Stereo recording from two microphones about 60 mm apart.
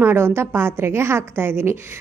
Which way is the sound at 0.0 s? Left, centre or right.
Right.